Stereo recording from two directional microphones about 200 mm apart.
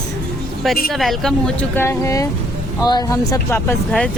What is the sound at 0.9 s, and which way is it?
Speech, centre (ahead or behind).